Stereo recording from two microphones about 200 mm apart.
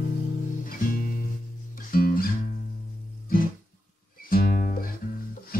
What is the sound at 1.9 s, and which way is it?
Music, 45° left (ahead or behind).